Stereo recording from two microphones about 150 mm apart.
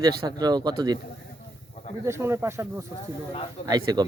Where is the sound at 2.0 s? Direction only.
15° right (ahead or behind).